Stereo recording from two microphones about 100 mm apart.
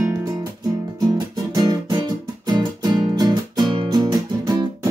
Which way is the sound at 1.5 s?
40° right (ahead or behind).